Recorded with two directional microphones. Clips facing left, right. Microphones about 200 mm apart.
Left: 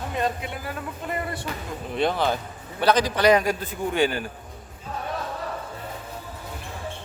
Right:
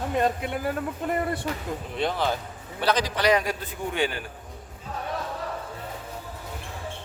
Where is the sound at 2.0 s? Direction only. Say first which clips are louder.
Left 4 dB; 60° left (ahead or behind); by 4.2 s 40° left (ahead or behind).